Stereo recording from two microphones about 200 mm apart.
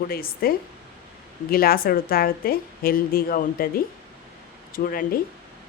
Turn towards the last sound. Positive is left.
turn(degrees=45)  # may be behind; listen again after turning